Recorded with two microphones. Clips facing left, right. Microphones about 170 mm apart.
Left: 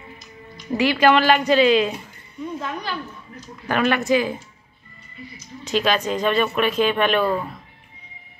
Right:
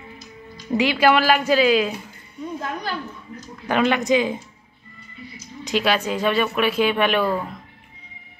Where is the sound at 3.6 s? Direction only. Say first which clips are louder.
Right 1 dB; 15° right (ahead or behind).